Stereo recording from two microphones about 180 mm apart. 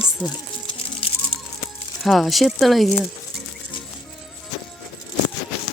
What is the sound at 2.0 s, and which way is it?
Speech, centre (ahead or behind).